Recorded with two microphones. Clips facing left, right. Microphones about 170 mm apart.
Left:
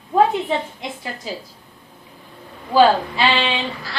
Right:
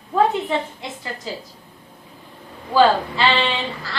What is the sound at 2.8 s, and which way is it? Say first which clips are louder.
A woman's voice: left 1 dB; 15° left (ahead or behind).